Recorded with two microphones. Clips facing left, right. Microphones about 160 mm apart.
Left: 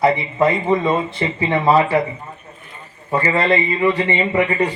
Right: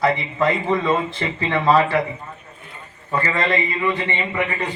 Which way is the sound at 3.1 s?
30° left (ahead or behind).